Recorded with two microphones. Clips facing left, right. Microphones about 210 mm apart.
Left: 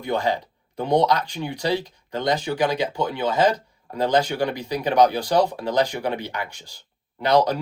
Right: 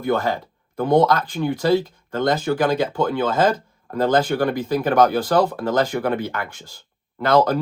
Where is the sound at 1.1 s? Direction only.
50° right (ahead or behind).